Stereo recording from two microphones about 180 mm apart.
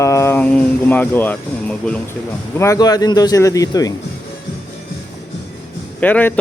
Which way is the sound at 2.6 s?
20° left (ahead or behind).